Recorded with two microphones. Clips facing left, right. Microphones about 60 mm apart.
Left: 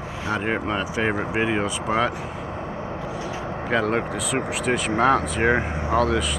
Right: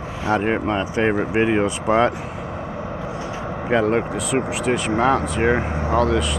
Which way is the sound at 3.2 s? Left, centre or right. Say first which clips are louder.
Right 2 dB; centre.